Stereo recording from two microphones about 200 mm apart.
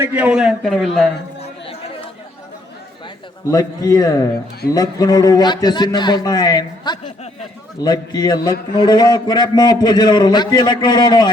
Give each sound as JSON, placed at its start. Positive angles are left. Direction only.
{"t": 0.0, "sound": "a man's voice", "side_deg": -5}
{"t": 1.4, "sound": "chatter", "side_deg": 30}
{"t": 3.4, "sound": "a man's voice", "side_deg": 15}